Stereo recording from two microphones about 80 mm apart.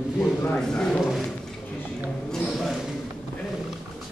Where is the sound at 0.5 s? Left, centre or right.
Centre.